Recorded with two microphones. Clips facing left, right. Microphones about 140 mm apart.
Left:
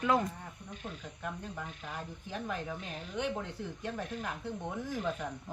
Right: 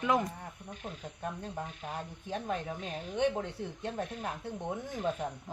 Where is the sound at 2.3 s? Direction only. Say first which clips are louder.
Right 3 dB; 25° right (ahead or behind).